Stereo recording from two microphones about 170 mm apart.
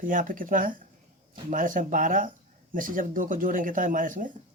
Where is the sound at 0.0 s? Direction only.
50° right (ahead or behind).